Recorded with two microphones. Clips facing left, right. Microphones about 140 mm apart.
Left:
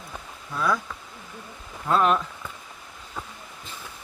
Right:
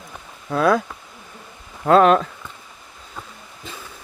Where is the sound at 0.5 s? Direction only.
70° right (ahead or behind).